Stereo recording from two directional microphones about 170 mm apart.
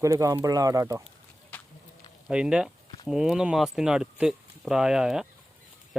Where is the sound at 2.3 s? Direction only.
5° right (ahead or behind).